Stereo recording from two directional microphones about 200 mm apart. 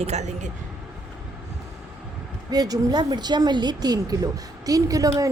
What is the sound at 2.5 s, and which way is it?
Speech, 20° right (ahead or behind).